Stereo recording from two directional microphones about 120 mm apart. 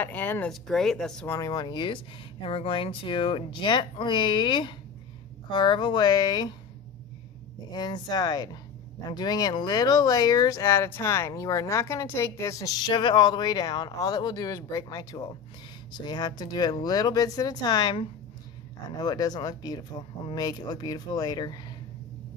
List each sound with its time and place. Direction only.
0.0 s speech: 15° left (ahead or behind)
0.5 s speech: 5° left (ahead or behind)
1.2 s speech: 25° left (ahead or behind)
7.7 s speech: 35° left (ahead or behind)